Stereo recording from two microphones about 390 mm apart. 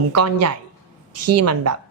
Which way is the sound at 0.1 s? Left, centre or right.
Right.